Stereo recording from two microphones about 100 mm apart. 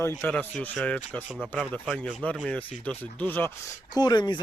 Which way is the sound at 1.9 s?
5° left (ahead or behind).